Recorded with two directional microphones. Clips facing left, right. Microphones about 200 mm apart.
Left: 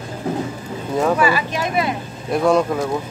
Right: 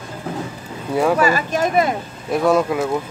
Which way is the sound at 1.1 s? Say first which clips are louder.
Right 1 dB; 45° right (ahead or behind).